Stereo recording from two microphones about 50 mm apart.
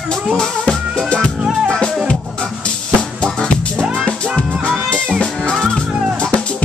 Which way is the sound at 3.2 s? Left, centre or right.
Centre.